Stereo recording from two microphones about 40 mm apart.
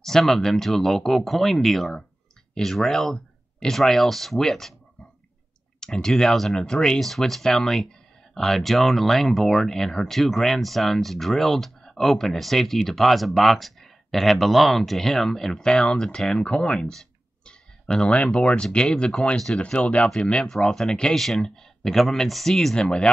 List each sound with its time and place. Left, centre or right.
0.0 s speech: centre
5.8 s speech: centre
6.3 s speech: centre
6.6 s speech: centre
7.0 s speech: centre
16.3 s speech: left
16.9 s a sound: centre
17.9 s speech: left
20.4 s speech: centre
22.8 s speech: left